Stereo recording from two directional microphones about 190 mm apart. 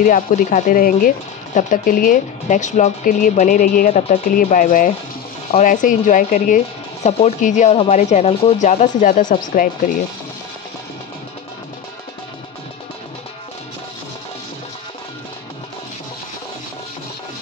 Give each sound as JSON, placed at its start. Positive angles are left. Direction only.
{"t": 0.0, "sound": "speech", "side_deg": 45}